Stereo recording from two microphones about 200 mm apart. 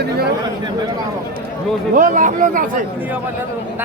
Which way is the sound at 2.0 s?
40° right (ahead or behind).